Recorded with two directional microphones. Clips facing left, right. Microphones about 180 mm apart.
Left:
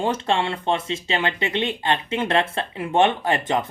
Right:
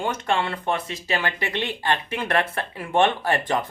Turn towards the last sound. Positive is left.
turn(degrees=20)  # may be behind; listen again after turning